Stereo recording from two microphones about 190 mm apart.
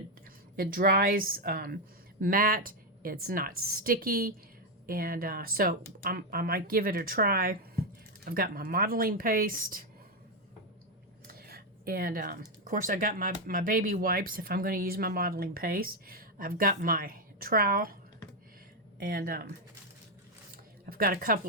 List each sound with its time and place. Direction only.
0.5 s speech: 50° right (ahead or behind)
11.3 s speech: 55° right (ahead or behind)
18.9 s speech: 50° right (ahead or behind)
20.8 s speech: 50° right (ahead or behind)